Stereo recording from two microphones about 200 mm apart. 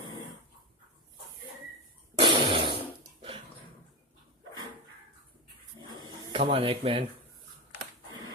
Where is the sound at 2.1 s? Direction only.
25° right (ahead or behind).